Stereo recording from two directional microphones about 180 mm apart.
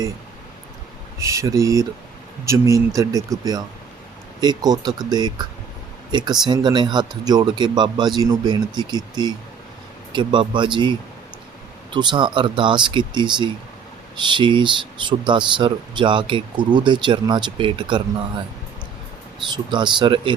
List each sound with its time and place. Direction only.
1.2 s speech: 15° right (ahead or behind)
19.5 s speech: 25° right (ahead or behind)